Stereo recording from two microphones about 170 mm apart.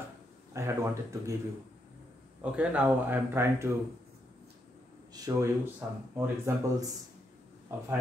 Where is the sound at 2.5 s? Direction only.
5° right (ahead or behind).